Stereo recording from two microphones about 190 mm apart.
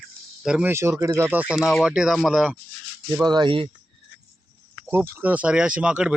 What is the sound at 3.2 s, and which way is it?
Speech, 25° right (ahead or behind).